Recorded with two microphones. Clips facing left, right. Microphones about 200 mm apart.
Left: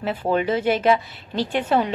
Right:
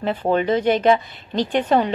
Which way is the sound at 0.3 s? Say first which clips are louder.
Right 2 dB; 5° left (ahead or behind).